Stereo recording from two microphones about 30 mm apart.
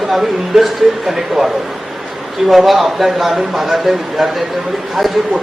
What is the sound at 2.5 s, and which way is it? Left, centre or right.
A man's voice, centre.